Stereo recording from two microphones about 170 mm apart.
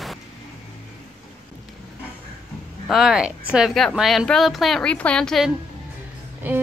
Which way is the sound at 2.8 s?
5° right (ahead or behind).